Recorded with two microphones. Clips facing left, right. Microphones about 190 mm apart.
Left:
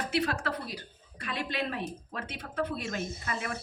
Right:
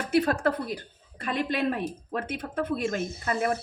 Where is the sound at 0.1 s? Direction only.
50° right (ahead or behind).